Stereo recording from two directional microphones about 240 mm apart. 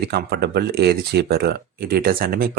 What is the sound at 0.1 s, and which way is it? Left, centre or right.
Speech, right.